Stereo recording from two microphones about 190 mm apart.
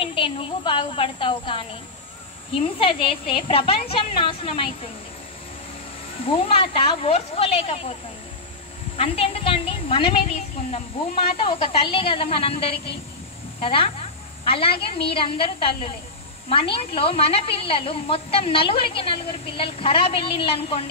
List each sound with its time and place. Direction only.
0.0 s a woman's voice: 30° left (ahead or behind)
6.2 s speech: 30° left (ahead or behind)
8.9 s a woman's voice: 30° left (ahead or behind)
11.3 s a woman's voice: 30° left (ahead or behind)